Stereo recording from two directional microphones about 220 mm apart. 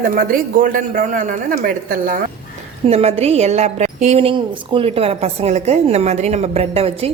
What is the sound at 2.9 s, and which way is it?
A woman's voice, 25° right (ahead or behind).